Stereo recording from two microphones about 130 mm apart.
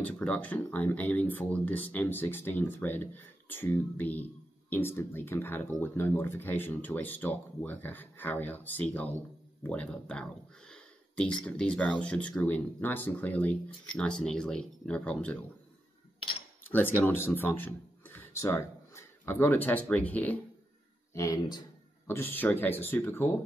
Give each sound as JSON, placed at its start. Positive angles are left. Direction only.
{"t": 0.0, "sound": "speech", "side_deg": 10}
{"t": 16.7, "sound": "speech", "side_deg": 15}
{"t": 21.1, "sound": "speech", "side_deg": 25}
{"t": 22.0, "sound": "speech", "side_deg": 15}